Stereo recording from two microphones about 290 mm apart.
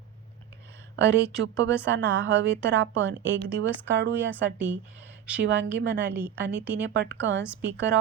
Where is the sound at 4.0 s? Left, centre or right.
Right.